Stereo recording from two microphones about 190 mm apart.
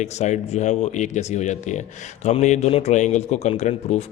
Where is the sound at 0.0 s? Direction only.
35° left (ahead or behind).